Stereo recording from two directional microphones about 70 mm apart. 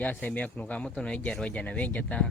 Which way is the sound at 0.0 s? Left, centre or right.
Left.